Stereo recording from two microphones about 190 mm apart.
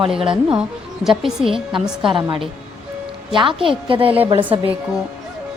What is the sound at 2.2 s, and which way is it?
Speech, 25° right (ahead or behind).